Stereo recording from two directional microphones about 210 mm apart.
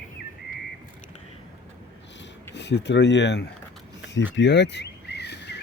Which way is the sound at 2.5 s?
55° left (ahead or behind).